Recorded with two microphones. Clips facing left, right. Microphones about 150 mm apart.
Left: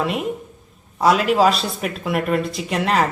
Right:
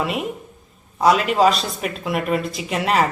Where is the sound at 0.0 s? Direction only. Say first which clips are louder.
Left 1 dB; centre (ahead or behind).